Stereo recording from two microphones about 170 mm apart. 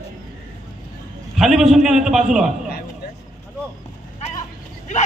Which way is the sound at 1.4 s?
Centre (ahead or behind).